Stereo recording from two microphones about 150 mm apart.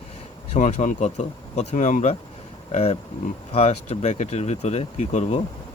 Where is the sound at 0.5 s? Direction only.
55° left (ahead or behind).